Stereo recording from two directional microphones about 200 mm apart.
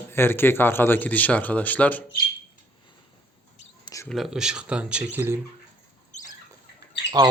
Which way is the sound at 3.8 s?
15° left (ahead or behind).